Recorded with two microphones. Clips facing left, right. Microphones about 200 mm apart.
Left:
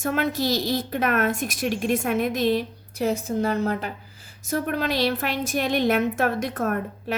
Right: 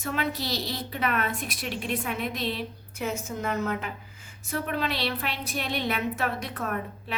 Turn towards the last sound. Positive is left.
turn(degrees=45)  # may be behind; listen again after turning